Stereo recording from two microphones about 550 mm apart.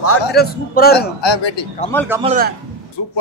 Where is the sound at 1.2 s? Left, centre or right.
Left.